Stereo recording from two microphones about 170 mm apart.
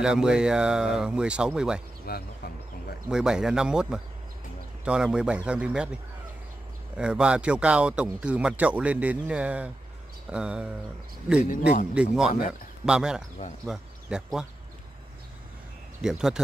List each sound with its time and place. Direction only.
0.0 s speech: 5° right (ahead or behind)
2.0 s speech: 65° left (ahead or behind)
3.1 s a man's voice: 5° right (ahead or behind)
7.0 s a man's voice: 5° right (ahead or behind)
11.9 s speech: 5° right (ahead or behind)
16.0 s speech: 5° right (ahead or behind)